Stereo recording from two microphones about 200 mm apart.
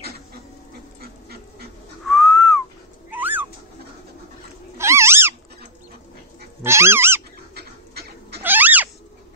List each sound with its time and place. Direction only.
1.0 s dog: 50° right (ahead or behind)
2.0 s whistling: centre (ahead or behind)
3.1 s bird: 10° right (ahead or behind)
4.7 s cat: 15° right (ahead or behind)
6.6 s cat: 10° right (ahead or behind)
7.5 s a sound: 55° right (ahead or behind)
8.4 s cat: 10° right (ahead or behind)